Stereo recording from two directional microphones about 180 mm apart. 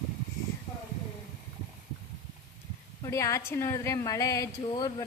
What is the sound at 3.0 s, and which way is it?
A woman's voice, 15° left (ahead or behind).